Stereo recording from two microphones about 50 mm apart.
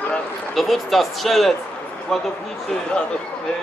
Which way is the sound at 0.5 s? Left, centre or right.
Centre.